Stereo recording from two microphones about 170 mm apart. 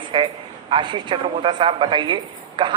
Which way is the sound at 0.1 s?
25° right (ahead or behind).